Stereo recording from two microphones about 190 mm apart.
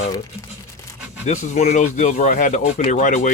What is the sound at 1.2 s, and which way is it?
Speech, 40° left (ahead or behind).